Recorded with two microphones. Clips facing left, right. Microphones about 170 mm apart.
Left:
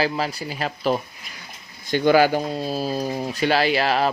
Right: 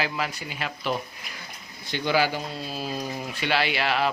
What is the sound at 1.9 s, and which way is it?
Speech, 50° left (ahead or behind).